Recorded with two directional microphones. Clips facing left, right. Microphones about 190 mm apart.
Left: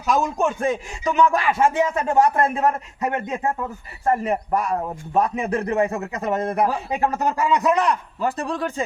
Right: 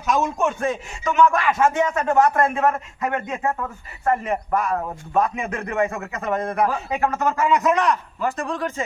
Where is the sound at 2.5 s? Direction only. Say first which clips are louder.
Even; 35° left (ahead or behind).